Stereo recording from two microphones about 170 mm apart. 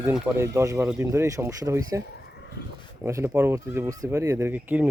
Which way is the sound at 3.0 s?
15° right (ahead or behind).